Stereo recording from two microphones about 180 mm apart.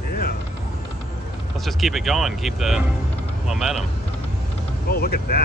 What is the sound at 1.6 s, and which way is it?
Speech, centre (ahead or behind).